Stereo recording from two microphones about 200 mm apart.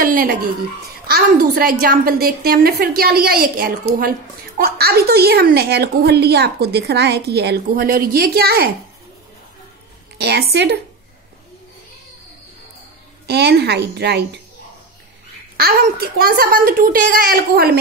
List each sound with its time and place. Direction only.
0.0 s a sound: 45° right (ahead or behind)
1.0 s a woman's voice: 50° right (ahead or behind)
10.1 s a woman's voice: 55° right (ahead or behind)
13.3 s a woman's voice: 55° right (ahead or behind)
15.5 s a woman's voice: 50° right (ahead or behind)